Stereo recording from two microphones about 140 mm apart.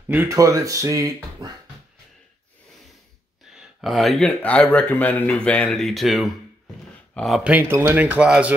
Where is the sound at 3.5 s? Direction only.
Centre (ahead or behind).